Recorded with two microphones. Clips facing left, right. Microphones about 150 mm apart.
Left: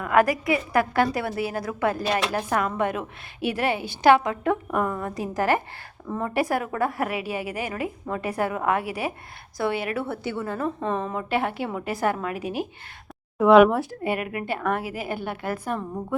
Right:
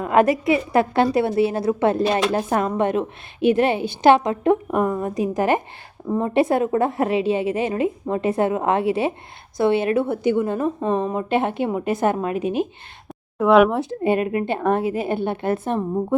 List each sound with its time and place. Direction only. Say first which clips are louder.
0.0 s a woman's voice: right 4 dB; 25° right (ahead or behind)
13.4 s speech: even; centre (ahead or behind)
13.7 s a woman's voice: right 6 dB; 25° right (ahead or behind)